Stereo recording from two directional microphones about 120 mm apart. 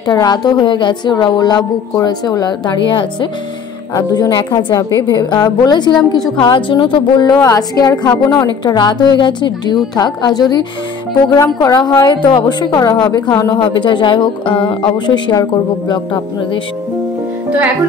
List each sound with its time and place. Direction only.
0.0 s speech: 35° left (ahead or behind)
8.1 s a woman's voice: 20° left (ahead or behind)
8.5 s speech: 40° left (ahead or behind)
11.6 s a woman's voice: 30° left (ahead or behind)
12.1 s speech: 40° left (ahead or behind)
13.6 s speech: 40° left (ahead or behind)